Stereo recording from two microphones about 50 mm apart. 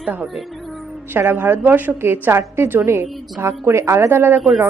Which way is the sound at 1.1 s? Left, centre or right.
Right.